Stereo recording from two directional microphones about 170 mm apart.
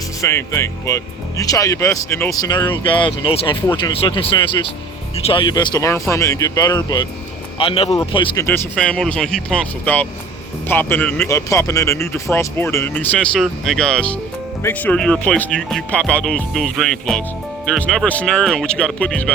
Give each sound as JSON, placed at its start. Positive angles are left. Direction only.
{"t": 0.2, "sound": "speech", "side_deg": 15}
{"t": 7.9, "sound": "speech", "side_deg": 25}
{"t": 8.4, "sound": "speech", "side_deg": 5}